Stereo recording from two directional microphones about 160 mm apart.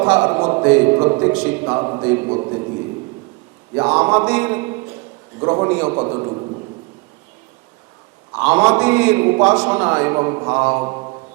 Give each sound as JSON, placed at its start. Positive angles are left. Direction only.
{"t": 0.0, "sound": "a man's voice", "side_deg": -20}
{"t": 3.8, "sound": "a man's voice", "side_deg": -20}
{"t": 8.4, "sound": "a man's voice", "side_deg": -10}